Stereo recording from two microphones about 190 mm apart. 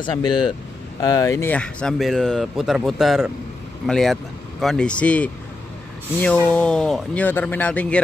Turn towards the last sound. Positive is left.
turn(degrees=5)  # may be behind; listen again after turning